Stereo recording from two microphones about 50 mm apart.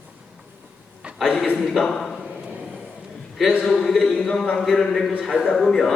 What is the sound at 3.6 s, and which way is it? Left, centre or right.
A man's voice, centre.